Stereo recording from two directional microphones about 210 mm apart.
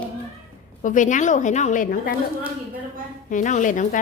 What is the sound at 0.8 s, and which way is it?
A woman's voice, 35° left (ahead or behind).